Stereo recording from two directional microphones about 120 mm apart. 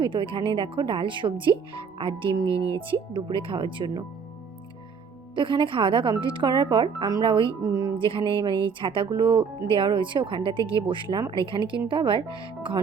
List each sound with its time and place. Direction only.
0.0 s speech: 45° right (ahead or behind)
5.3 s speech: 40° right (ahead or behind)
7.6 s speech: 30° right (ahead or behind)
7.9 s speech: 45° right (ahead or behind)